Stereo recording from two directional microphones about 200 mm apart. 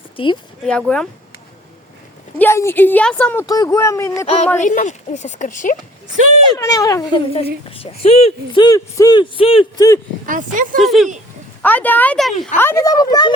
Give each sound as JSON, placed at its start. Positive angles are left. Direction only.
{"t": 0.2, "sound": "speech", "side_deg": 25}
{"t": 0.6, "sound": "speech", "side_deg": 5}
{"t": 2.4, "sound": "a woman's voice", "side_deg": 10}
{"t": 4.6, "sound": "speech", "side_deg": 40}
{"t": 6.5, "sound": "speech", "side_deg": 20}
{"t": 10.2, "sound": "speech", "side_deg": -40}
{"t": 10.8, "sound": "a woman's voice", "side_deg": 0}
{"t": 12.5, "sound": "speech", "side_deg": 15}